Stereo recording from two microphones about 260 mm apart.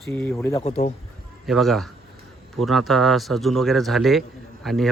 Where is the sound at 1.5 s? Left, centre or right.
Centre.